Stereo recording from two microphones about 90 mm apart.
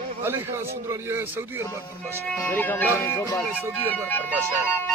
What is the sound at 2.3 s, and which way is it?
Speech, 20° left (ahead or behind).